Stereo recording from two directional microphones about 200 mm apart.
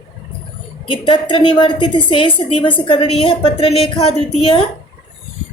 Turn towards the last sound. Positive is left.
turn(degrees=25)  # may be behind; listen again after turning